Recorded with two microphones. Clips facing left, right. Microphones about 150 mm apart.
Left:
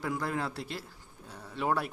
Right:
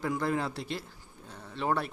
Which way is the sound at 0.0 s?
Centre (ahead or behind).